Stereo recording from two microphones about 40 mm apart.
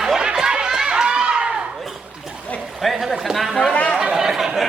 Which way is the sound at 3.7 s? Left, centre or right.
Left.